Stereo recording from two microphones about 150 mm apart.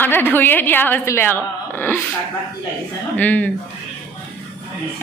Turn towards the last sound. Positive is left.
turn(degrees=10)  # may be behind; listen again after turning